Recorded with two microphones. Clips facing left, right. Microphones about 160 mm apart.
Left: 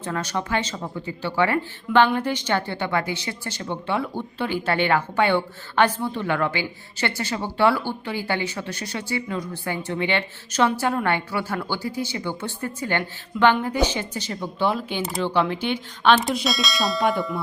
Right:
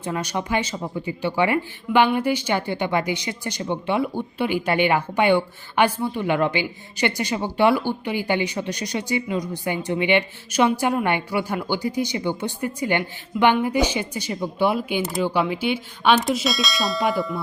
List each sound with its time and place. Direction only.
0.0 s speech: 15° right (ahead or behind)
15.0 s speech: centre (ahead or behind)